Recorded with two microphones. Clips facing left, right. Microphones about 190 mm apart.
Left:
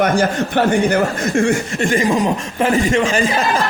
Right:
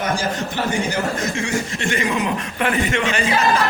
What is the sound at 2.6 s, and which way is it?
Speech, 30° left (ahead or behind).